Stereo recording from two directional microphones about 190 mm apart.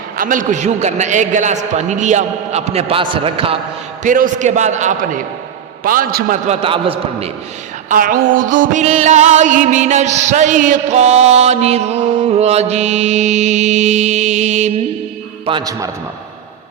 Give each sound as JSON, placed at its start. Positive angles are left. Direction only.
{"t": 0.2, "sound": "music", "side_deg": -45}
{"t": 4.0, "sound": "music", "side_deg": -45}
{"t": 7.9, "sound": "music", "side_deg": -45}
{"t": 15.4, "sound": "a man's voice", "side_deg": -20}